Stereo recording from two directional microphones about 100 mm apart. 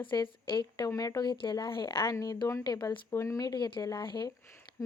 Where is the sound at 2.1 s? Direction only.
35° left (ahead or behind).